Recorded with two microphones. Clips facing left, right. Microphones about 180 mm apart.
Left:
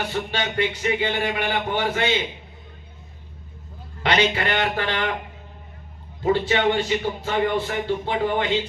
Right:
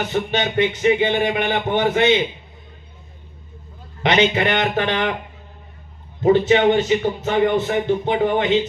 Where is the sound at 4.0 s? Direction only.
20° right (ahead or behind).